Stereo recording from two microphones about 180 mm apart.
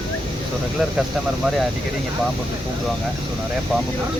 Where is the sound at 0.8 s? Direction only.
Centre (ahead or behind).